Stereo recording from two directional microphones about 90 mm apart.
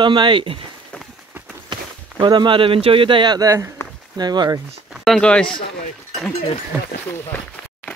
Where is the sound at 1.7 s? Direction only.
60° right (ahead or behind).